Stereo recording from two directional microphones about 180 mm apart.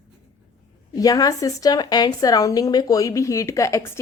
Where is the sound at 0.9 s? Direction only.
20° left (ahead or behind).